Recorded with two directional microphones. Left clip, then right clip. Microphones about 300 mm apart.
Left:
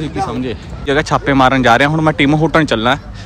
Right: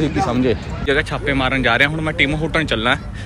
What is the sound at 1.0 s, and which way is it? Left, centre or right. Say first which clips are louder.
A man's voice: left 12 dB; left.